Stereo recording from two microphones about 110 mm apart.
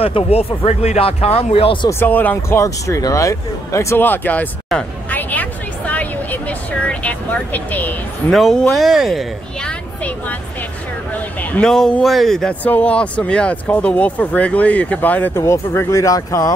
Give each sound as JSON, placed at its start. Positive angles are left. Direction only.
{"t": 0.0, "sound": "speech", "side_deg": 65}
{"t": 1.9, "sound": "speech", "side_deg": 20}
{"t": 5.1, "sound": "a sound", "side_deg": 15}
{"t": 8.3, "sound": "speech", "side_deg": 0}
{"t": 11.5, "sound": "speech", "side_deg": 5}